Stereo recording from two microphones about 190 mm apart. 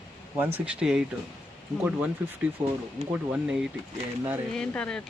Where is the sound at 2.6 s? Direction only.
15° right (ahead or behind).